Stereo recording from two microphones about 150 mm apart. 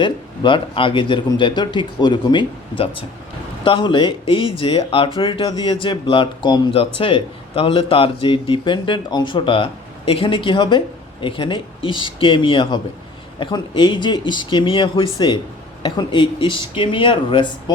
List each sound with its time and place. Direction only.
0.0 s speech: 35° left (ahead or behind)